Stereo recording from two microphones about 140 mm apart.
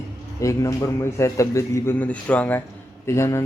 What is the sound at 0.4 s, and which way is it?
A man's voice, 20° left (ahead or behind).